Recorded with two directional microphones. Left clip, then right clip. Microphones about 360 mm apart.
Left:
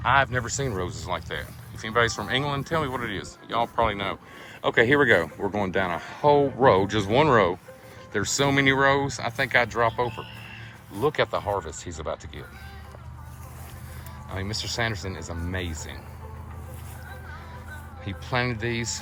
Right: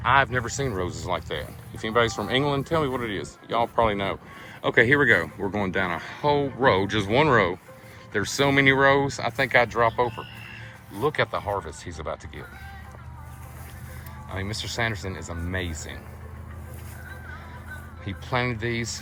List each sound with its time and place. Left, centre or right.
0.0 s speech: centre
14.3 s speech: centre
18.0 s speech: centre